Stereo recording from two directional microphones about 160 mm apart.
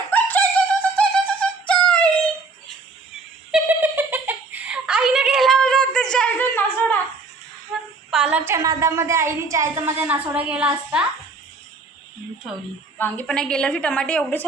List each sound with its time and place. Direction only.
0.1 s music: 10° left (ahead or behind)
3.5 s giggle: 10° right (ahead or behind); by 7.0 s 5° left (ahead or behind)
7.7 s female singing: centre (ahead or behind)
8.1 s a sound: 5° right (ahead or behind)
8.4 s a woman's voice: 20° right (ahead or behind)
13.0 s a woman's voice: 5° left (ahead or behind)